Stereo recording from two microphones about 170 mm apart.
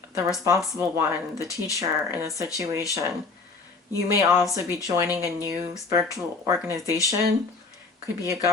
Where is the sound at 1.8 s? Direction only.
20° right (ahead or behind).